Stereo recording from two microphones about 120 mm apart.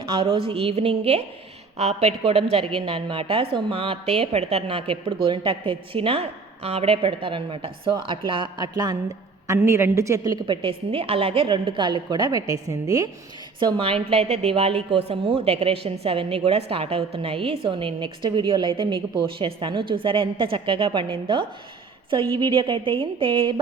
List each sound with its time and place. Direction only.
0.1 s a woman's voice: 50° right (ahead or behind)
9.5 s a woman's voice: 25° right (ahead or behind)
10.4 s a woman's voice: 45° right (ahead or behind); by 13.1 s 30° right (ahead or behind)
13.6 s a woman's voice: 45° right (ahead or behind)